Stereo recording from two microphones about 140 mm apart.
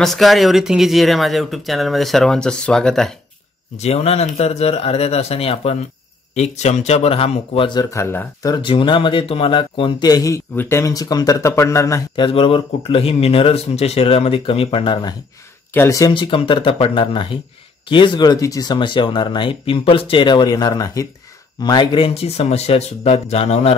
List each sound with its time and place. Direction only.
0.0 s speech: centre (ahead or behind)
3.7 s a man's voice: 50° left (ahead or behind); by 8.5 s 15° left (ahead or behind)
8.5 s speech: 35° left (ahead or behind)
12.2 s speech: 40° left (ahead or behind)
15.7 s speech: 20° left (ahead or behind)
16.1 s speech: 35° left (ahead or behind)
21.6 s a man's voice: 35° left (ahead or behind)